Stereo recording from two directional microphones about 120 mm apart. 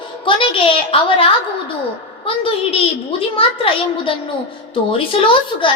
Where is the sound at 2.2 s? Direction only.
50° left (ahead or behind).